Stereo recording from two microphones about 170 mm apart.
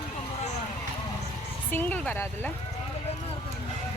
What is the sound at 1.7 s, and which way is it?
Speech, 10° left (ahead or behind).